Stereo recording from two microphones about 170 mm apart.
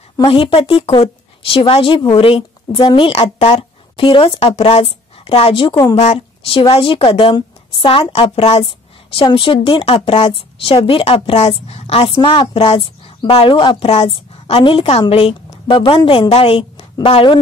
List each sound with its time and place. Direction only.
0.3 s a woman's voice: 30° left (ahead or behind)